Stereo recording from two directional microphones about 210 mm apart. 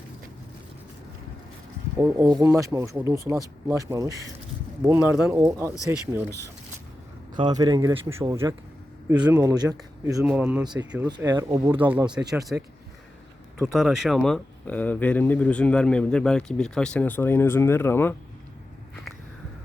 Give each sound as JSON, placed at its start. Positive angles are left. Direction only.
{"t": 2.0, "sound": "speech", "side_deg": -10}
{"t": 7.3, "sound": "speech", "side_deg": -20}
{"t": 10.3, "sound": "speech", "side_deg": -5}